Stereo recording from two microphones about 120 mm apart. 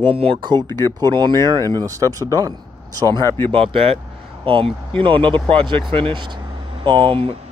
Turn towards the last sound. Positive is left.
turn(degrees=-45)  # may be behind; listen again after turning